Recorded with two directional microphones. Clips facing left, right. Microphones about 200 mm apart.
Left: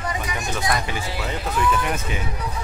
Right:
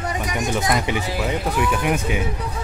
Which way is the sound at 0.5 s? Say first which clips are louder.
Right 3 dB; 20° right (ahead or behind).